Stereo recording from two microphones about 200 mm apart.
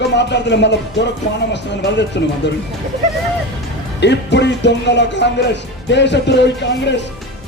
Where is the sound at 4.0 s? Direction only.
60° left (ahead or behind).